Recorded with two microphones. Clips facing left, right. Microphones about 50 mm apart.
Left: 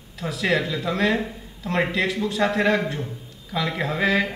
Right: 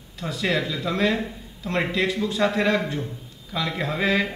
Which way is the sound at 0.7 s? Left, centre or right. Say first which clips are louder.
Left 1 dB; left.